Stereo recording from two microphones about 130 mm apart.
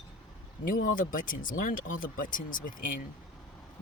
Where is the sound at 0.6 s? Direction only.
90° left.